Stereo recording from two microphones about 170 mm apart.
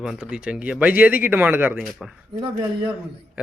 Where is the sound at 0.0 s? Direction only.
5° right (ahead or behind).